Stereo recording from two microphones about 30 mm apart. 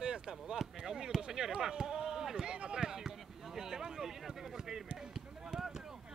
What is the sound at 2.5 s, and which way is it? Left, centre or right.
Speech, right.